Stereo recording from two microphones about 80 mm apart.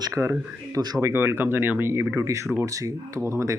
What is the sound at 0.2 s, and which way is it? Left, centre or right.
Speech, right.